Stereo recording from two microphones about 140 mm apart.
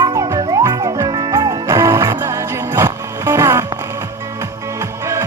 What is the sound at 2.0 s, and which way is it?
Music, 20° right (ahead or behind).